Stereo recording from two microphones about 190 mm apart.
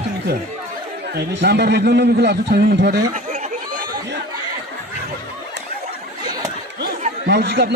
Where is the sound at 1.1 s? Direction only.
65° right (ahead or behind).